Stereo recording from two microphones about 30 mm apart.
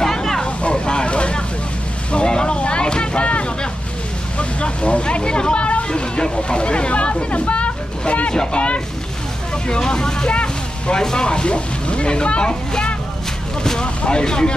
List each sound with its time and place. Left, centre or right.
0.0 s vehicle: centre
0.8 s vehicle: left
4.4 s vehicle: left
5.9 s a sound: left
9.7 s vehicle: left
10.3 s a sound: left
11.2 s speech: left